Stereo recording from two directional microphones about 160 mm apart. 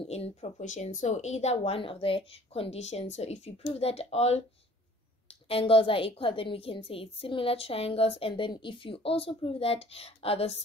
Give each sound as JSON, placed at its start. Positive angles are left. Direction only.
{"t": 0.0, "sound": "a woman's voice", "side_deg": 40}